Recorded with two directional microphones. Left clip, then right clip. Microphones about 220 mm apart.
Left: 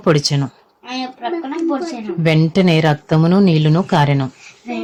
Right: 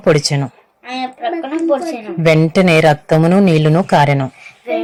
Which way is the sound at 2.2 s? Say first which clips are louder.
Right 4 dB; 5° right (ahead or behind).